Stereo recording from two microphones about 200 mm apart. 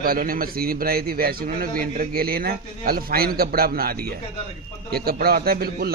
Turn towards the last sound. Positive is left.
turn(degrees=-50)  # may be behind; listen again after turning